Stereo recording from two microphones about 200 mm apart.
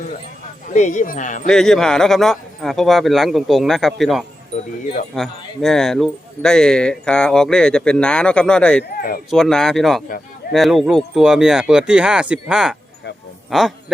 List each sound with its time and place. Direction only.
0.7 s speech: 40° left (ahead or behind)
1.5 s speech: 5° left (ahead or behind)
9.0 s speech: 45° left (ahead or behind)
9.3 s speech: centre (ahead or behind)